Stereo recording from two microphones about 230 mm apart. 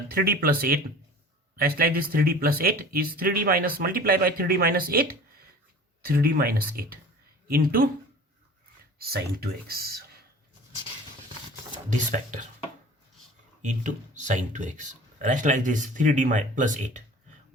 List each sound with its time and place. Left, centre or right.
0.1 s speech: right
9.0 s speech: right
11.9 s speech: right
13.6 s speech: right